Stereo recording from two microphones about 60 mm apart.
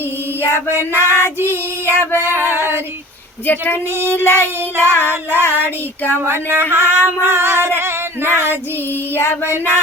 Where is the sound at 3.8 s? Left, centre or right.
Right.